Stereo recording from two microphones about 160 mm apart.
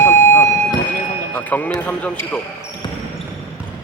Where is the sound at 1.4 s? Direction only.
10° left (ahead or behind).